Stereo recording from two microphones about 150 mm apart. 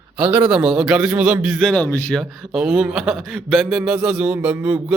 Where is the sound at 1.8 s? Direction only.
10° left (ahead or behind); by 5.0 s 10° right (ahead or behind).